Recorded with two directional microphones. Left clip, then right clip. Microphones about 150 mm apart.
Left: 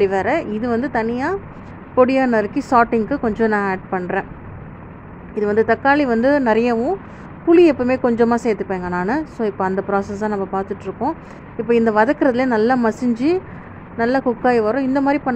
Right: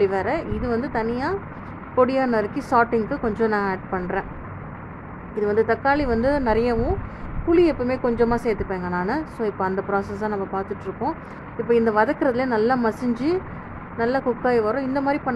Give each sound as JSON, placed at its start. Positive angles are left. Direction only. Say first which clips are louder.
{"t": 0.0, "sound": "a woman's voice", "louder": "left 4 dB", "side_deg": 15}
{"t": 5.3, "sound": "a woman's voice", "louder": "left 4 dB", "side_deg": 15}